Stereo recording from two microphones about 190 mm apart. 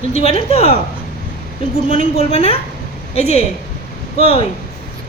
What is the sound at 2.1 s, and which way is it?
Speech, 35° left (ahead or behind).